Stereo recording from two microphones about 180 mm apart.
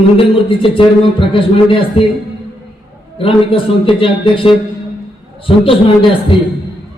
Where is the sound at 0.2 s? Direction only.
30° left (ahead or behind).